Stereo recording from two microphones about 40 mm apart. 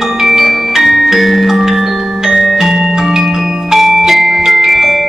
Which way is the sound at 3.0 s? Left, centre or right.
Centre.